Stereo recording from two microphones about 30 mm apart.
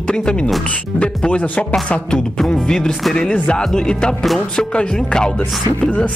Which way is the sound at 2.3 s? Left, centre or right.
Centre.